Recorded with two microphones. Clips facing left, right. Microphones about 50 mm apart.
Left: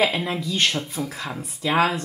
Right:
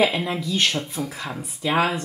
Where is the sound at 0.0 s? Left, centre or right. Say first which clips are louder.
Right 1 dB; centre.